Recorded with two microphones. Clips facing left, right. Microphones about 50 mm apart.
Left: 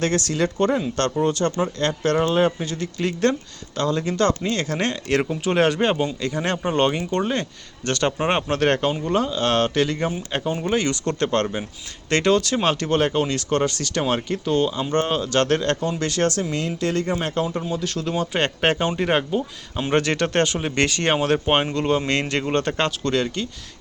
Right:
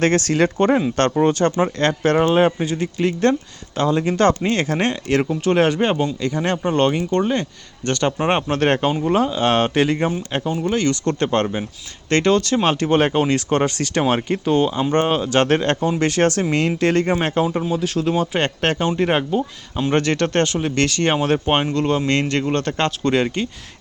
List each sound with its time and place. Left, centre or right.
0.0 s speech: right
2.6 s speech: centre
3.8 s speech: right
5.0 s speech: centre; by 10.1 s right
10.1 s speech: centre
11.1 s speech: centre
12.1 s speech: centre
12.9 s speech: right
17.6 s speech: centre
18.3 s speech: centre
19.0 s speech: centre
19.9 s speech: centre
21.1 s speech: centre
23.1 s speech: right